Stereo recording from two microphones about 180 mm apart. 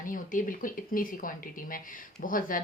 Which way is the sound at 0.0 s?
50° left (ahead or behind).